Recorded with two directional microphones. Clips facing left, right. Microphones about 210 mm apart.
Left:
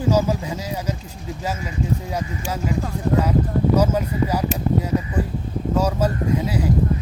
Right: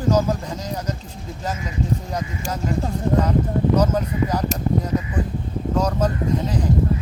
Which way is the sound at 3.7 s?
10° left (ahead or behind).